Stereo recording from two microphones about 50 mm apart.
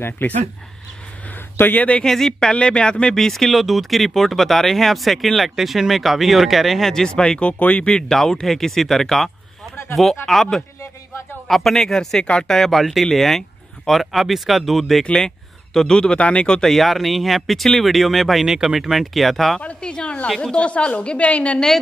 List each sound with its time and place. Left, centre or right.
0.2 s speech: left
1.3 s a sound: left
2.0 s speech: centre
7.2 s a woman's voice: left
7.9 s speech: centre
16.6 s speech: centre
19.6 s a woman's voice: left
20.5 s a woman's voice: left